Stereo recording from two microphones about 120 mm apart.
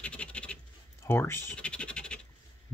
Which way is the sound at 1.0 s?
20° left (ahead or behind).